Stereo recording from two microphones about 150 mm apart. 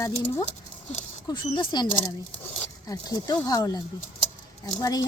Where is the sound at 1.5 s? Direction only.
30° left (ahead or behind).